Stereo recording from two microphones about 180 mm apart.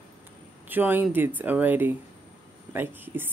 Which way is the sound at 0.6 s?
10° right (ahead or behind).